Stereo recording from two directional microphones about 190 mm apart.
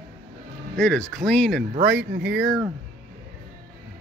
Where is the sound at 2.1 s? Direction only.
55° right (ahead or behind).